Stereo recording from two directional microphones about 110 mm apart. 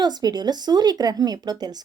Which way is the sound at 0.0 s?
40° right (ahead or behind).